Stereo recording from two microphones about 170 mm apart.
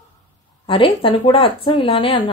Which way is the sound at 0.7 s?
30° left (ahead or behind).